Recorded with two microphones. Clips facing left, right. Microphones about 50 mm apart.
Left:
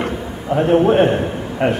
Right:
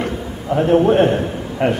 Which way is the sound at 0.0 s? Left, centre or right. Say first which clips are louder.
Left 1 dB; centre.